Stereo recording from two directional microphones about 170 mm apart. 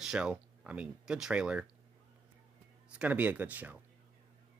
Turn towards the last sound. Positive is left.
turn(degrees=-10)  # may be behind; listen again after turning